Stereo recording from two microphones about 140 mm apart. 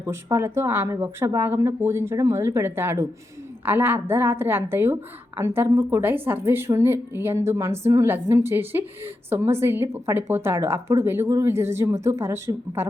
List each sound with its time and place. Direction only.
0.0 s a woman's voice: 20° right (ahead or behind)